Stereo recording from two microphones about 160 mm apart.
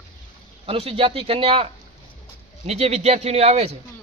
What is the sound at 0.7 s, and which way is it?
Speech, 35° right (ahead or behind).